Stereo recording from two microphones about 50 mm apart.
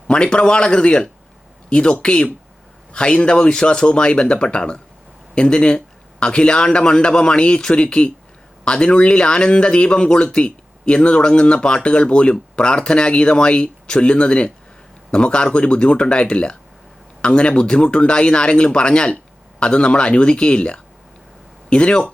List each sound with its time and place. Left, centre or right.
0.1 s speech: centre